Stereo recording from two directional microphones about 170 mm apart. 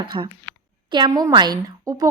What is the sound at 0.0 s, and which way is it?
A woman's voice, 30° right (ahead or behind).